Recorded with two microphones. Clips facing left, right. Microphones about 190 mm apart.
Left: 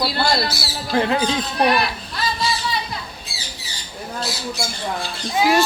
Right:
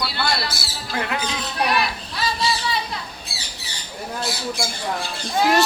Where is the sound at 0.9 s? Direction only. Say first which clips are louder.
Left 7 dB; 30° left (ahead or behind).